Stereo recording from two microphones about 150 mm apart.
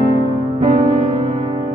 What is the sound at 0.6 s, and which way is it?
Music, 55° right (ahead or behind).